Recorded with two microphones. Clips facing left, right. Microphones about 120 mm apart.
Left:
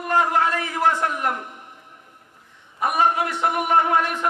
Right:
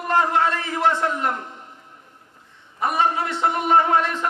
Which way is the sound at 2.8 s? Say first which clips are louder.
Left 1 dB; 25° right (ahead or behind).